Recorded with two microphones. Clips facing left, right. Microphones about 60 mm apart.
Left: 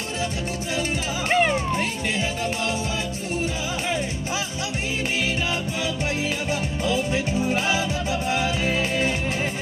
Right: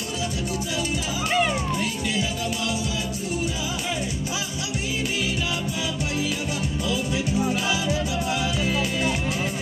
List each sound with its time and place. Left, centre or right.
1.3 s music: left
6.8 s music: left